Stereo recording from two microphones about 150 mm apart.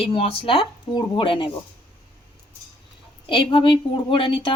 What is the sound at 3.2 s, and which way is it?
Speech, 35° left (ahead or behind).